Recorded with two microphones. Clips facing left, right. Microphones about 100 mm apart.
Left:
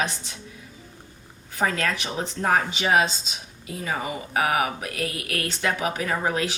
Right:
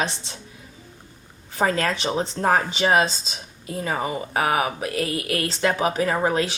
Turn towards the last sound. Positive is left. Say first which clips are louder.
# right 4 dB
turn(degrees=-35)  # may be behind; listen again after turning